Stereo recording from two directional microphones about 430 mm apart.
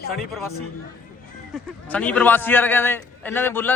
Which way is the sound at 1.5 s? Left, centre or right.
Centre.